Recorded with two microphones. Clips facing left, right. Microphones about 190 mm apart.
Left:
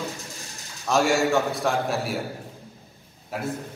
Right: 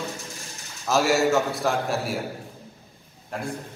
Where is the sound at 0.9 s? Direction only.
Centre (ahead or behind).